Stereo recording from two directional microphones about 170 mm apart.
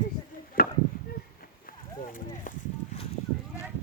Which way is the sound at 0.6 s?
65° left (ahead or behind).